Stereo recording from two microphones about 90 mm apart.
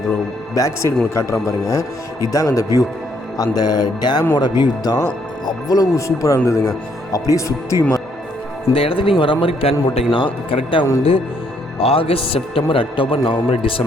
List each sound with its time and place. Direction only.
0.5 s speech: 35° left (ahead or behind)
3.3 s music: 45° left (ahead or behind)
5.5 s speech: 45° left (ahead or behind)
8.7 s a man's voice: 85° left
11.8 s a man's voice: 90° left